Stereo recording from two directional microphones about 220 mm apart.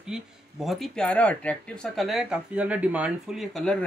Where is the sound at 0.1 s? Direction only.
Centre (ahead or behind).